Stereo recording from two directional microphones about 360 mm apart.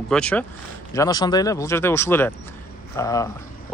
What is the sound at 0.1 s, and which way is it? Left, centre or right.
Speech, centre.